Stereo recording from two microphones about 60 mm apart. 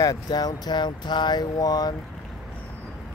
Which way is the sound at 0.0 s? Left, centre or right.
Left.